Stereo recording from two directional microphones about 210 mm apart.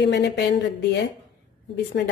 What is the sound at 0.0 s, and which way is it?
A woman's voice, 55° left (ahead or behind).